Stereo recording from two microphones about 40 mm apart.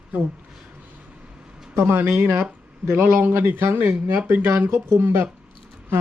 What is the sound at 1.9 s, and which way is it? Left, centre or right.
Speech, right.